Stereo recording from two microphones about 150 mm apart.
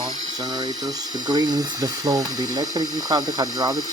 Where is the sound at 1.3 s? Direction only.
25° right (ahead or behind).